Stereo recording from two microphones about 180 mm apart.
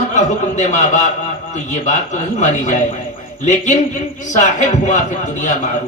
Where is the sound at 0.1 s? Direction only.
40° left (ahead or behind).